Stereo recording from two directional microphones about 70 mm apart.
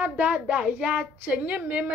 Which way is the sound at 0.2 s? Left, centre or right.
Centre.